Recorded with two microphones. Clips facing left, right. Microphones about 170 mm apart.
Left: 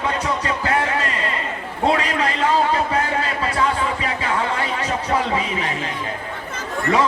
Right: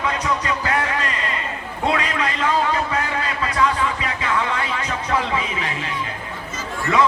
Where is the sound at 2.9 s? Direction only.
30° left (ahead or behind).